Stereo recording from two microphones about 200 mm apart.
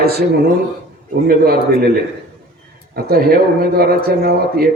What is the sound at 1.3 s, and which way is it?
Speech, 50° right (ahead or behind).